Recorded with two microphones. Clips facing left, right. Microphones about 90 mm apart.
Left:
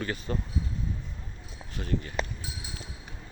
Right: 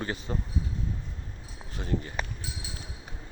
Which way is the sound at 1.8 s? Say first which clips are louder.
Even; 25° right (ahead or behind).